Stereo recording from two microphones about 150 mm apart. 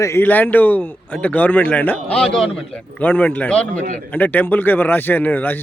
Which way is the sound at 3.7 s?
55° right (ahead or behind).